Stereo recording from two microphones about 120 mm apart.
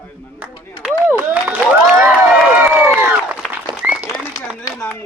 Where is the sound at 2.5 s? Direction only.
15° right (ahead or behind).